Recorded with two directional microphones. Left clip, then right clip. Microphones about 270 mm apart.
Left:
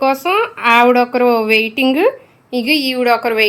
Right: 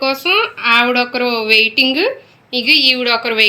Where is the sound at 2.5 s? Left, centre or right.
Centre.